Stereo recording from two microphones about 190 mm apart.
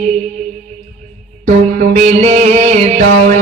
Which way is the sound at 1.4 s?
40° right (ahead or behind).